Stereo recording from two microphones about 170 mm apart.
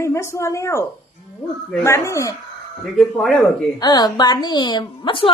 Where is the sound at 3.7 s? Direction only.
25° left (ahead or behind).